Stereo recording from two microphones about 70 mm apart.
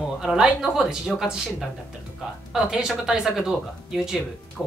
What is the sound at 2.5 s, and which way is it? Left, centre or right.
Speech, centre.